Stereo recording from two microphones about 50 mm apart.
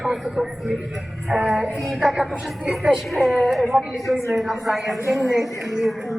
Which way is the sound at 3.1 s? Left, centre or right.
Centre.